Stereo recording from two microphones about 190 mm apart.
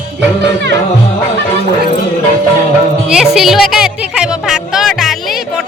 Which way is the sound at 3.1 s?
Centre (ahead or behind).